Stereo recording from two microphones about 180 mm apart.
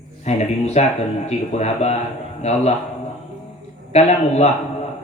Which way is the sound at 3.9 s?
35° left (ahead or behind).